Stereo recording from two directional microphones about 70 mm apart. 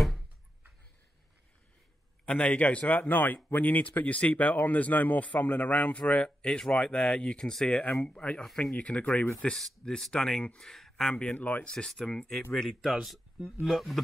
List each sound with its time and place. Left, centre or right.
2.2 s speech: centre
11.7 s speech: centre